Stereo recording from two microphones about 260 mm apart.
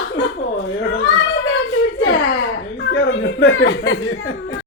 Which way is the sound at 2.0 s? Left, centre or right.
Left.